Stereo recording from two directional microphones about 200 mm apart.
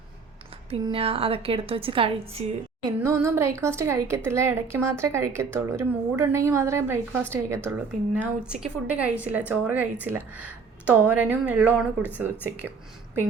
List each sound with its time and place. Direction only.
0.7 s a woman's voice: 30° right (ahead or behind)
3.0 s a woman's voice: 15° right (ahead or behind)